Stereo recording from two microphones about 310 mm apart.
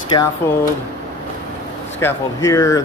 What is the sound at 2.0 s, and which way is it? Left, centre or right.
Speech, centre.